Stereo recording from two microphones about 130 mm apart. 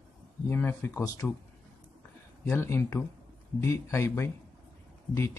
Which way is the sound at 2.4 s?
20° left (ahead or behind).